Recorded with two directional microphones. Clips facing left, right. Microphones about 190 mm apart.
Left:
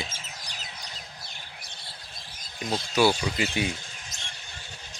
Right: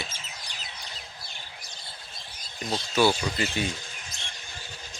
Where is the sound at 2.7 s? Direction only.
10° left (ahead or behind).